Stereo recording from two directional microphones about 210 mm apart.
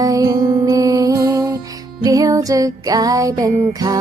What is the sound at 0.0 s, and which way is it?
Music, 15° right (ahead or behind).